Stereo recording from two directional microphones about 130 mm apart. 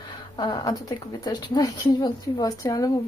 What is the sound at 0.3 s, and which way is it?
Speech, 35° left (ahead or behind).